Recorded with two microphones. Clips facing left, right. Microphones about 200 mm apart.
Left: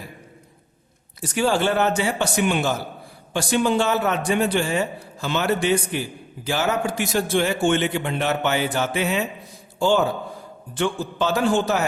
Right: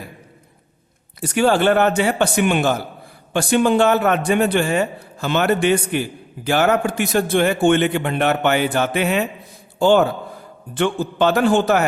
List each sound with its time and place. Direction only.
1.2 s a man's voice: 60° right (ahead or behind)